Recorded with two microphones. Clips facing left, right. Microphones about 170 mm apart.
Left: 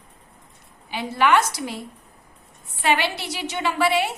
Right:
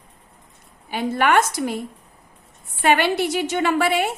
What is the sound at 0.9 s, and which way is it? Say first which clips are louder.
Speech: right 1 dB; 50° right (ahead or behind).